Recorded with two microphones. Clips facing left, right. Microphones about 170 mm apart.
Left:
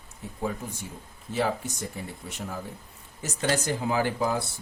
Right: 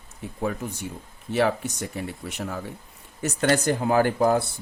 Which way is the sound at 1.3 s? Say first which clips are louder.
Right 5 dB; 70° right (ahead or behind).